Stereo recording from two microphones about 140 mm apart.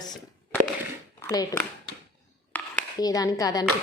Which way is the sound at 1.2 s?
25° left (ahead or behind).